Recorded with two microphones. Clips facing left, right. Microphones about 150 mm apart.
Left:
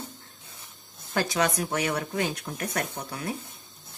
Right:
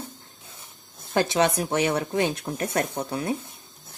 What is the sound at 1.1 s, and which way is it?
Speech, 25° right (ahead or behind).